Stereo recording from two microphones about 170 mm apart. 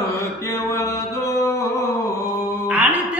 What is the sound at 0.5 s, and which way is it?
Mantra, 20° left (ahead or behind).